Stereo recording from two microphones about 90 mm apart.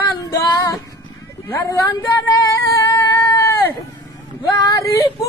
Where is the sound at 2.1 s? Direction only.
40° left (ahead or behind).